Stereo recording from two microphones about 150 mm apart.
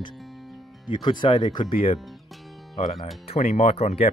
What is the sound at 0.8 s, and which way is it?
Speech, 30° left (ahead or behind).